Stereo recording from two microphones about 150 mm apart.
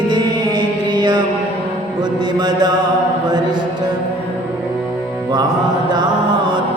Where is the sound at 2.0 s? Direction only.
30° right (ahead or behind).